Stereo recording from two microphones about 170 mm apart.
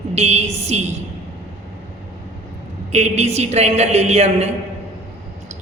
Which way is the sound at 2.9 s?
40° right (ahead or behind).